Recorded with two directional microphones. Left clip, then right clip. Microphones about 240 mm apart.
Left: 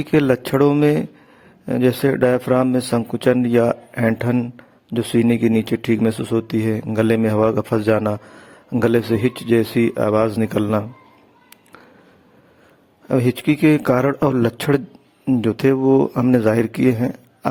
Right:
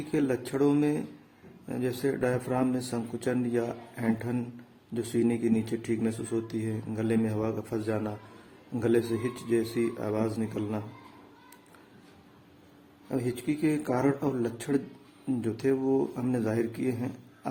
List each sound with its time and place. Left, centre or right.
0.1 s speech: left
13.1 s speech: left
15.3 s speech: left